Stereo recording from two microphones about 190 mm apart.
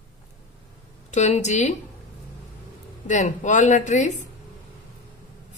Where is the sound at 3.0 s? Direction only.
40° left (ahead or behind).